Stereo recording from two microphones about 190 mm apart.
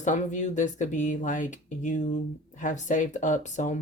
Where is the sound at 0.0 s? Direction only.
40° left (ahead or behind).